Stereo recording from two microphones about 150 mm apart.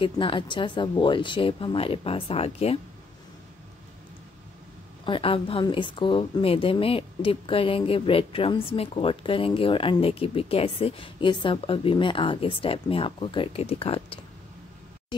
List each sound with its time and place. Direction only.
0.0 s a woman's voice: 35° left (ahead or behind)
5.0 s a woman's voice: 35° left (ahead or behind)